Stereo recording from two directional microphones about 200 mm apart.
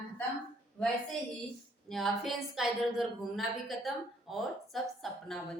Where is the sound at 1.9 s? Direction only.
Centre (ahead or behind).